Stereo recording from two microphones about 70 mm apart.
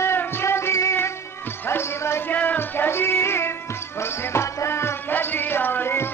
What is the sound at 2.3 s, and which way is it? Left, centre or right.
Music, left.